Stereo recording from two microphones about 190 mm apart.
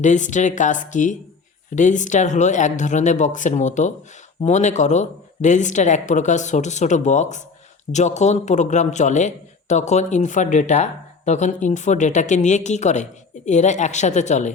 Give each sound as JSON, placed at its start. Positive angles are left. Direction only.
{"t": 0.0, "sound": "speech", "side_deg": 40}